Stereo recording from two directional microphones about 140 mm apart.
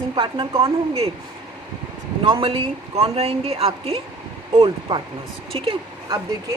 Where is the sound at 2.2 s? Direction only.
40° right (ahead or behind).